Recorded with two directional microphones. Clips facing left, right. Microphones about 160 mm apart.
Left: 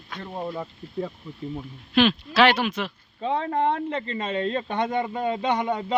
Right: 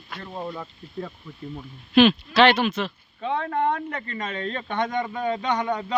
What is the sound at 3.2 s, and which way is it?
A man's voice, 35° left (ahead or behind).